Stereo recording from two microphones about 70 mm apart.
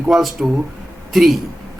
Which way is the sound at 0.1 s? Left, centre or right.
Centre.